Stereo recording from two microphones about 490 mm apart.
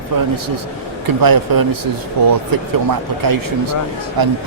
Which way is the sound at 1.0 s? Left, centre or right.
Right.